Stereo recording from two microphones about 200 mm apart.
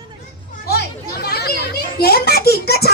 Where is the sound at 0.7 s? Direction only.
50° left (ahead or behind).